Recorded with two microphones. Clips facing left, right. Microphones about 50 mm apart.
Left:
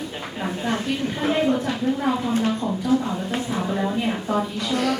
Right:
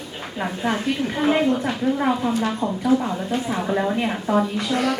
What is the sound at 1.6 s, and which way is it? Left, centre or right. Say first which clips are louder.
A woman's voice: right 2 dB; centre.